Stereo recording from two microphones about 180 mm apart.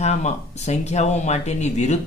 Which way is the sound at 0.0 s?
40° left (ahead or behind).